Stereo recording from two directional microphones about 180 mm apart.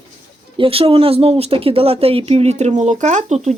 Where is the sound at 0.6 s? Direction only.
30° right (ahead or behind).